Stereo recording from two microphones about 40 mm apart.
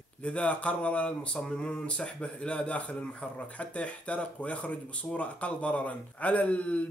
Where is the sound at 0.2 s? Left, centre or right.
Left.